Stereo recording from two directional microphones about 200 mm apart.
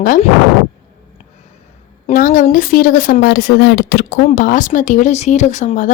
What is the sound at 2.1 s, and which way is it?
Speech, 45° left (ahead or behind).